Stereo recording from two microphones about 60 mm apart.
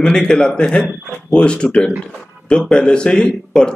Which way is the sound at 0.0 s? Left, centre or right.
Centre.